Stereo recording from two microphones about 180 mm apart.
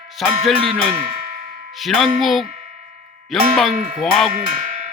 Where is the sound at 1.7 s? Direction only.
Centre (ahead or behind).